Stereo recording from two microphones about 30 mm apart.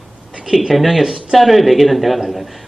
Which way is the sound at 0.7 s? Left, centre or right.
Centre.